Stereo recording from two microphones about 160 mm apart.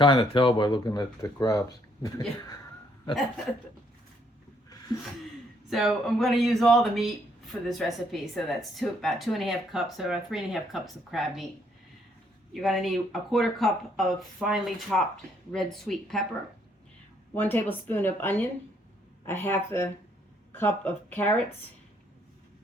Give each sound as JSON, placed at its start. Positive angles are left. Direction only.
{"t": 0.0, "sound": "speech", "side_deg": 30}
{"t": 5.7, "sound": "speech", "side_deg": 0}
{"t": 12.6, "sound": "speech", "side_deg": 0}
{"t": 17.3, "sound": "speech", "side_deg": 10}